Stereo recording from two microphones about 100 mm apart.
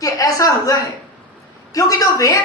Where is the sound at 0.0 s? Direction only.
35° left (ahead or behind).